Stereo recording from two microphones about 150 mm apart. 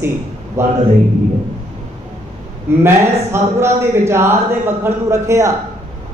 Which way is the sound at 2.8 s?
15° right (ahead or behind).